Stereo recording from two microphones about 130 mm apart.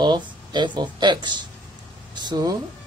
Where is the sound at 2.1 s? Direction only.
35° right (ahead or behind).